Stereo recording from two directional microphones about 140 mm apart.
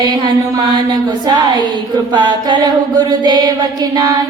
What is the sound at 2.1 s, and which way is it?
Mantra, 35° right (ahead or behind).